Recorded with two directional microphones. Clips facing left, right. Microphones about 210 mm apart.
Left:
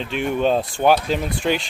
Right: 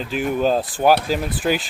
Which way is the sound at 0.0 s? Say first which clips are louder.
Even; centre (ahead or behind).